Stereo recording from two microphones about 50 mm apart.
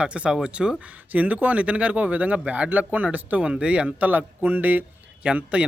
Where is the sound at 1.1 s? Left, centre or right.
Right.